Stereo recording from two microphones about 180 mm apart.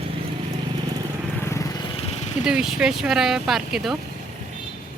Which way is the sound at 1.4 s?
15° left (ahead or behind).